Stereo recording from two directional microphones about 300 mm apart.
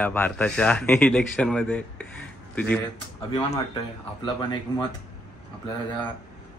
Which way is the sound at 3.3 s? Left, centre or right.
Centre.